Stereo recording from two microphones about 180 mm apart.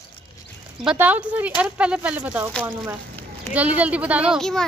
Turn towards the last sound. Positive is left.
turn(degrees=0)  # may be behind; listen again after turning